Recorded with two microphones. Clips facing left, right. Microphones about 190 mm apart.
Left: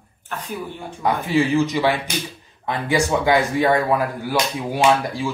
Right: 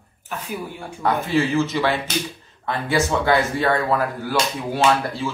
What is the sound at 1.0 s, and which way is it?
Speech, 15° left (ahead or behind).